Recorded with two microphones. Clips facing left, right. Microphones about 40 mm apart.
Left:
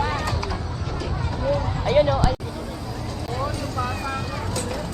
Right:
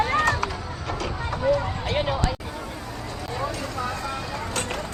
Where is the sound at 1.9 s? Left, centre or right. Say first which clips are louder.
Left 8 dB; centre.